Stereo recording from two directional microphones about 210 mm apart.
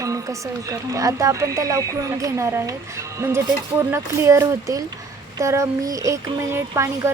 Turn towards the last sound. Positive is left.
turn(degrees=-15)  # may be behind; listen again after turning